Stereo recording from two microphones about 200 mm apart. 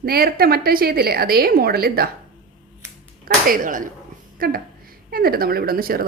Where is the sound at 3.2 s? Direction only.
45° right (ahead or behind).